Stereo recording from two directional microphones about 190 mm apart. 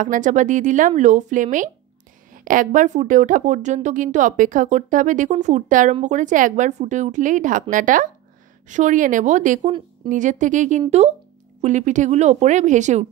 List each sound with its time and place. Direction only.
0.0 s speech: 40° right (ahead or behind)